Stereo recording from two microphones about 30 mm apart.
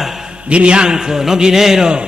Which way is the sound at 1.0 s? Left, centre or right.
Centre.